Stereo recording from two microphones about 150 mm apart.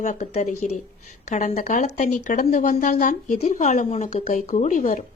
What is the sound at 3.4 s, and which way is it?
Speech, 50° left (ahead or behind).